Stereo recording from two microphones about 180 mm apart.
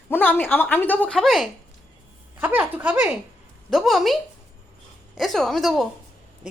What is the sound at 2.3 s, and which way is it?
A woman's voice, 10° right (ahead or behind).